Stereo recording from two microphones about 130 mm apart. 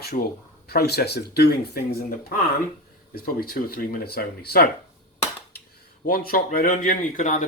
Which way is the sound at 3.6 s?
90° left.